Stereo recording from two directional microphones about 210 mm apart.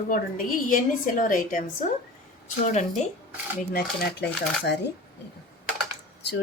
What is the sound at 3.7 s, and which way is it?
Speech, 50° left (ahead or behind).